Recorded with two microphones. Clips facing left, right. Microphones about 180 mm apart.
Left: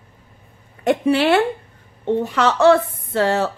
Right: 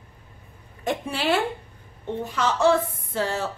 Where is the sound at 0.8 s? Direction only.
70° left (ahead or behind).